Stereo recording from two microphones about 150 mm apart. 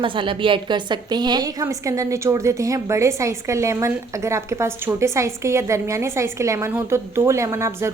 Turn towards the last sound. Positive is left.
turn(degrees=-20)  # may be behind; listen again after turning